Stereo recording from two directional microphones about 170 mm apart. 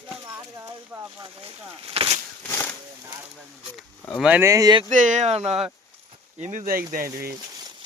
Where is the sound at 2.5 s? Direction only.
10° left (ahead or behind).